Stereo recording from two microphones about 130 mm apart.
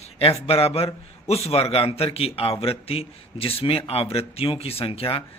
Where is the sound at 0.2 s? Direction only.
50° left (ahead or behind).